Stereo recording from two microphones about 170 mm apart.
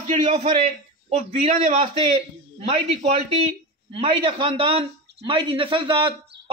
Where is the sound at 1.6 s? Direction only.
50° right (ahead or behind).